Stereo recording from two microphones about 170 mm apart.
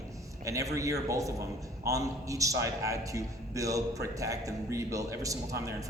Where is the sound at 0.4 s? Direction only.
20° right (ahead or behind).